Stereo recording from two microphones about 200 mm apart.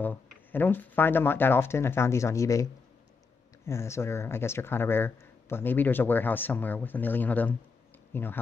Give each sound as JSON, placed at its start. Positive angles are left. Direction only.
{"t": 0.0, "sound": "speech", "side_deg": 10}